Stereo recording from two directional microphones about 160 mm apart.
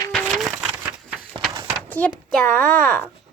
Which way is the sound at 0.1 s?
5° left (ahead or behind).